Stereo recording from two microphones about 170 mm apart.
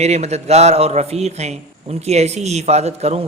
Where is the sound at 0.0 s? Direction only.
40° right (ahead or behind).